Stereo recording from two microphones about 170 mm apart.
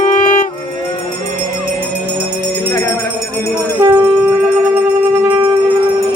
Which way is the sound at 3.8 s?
20° right (ahead or behind).